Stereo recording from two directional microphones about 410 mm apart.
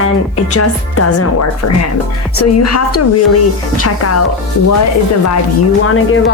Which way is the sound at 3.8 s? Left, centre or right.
Left.